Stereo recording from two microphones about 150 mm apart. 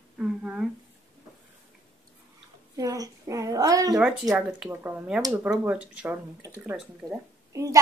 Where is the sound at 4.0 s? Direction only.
Centre (ahead or behind).